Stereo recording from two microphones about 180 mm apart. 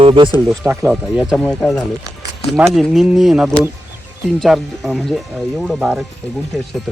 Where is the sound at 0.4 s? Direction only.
Centre (ahead or behind).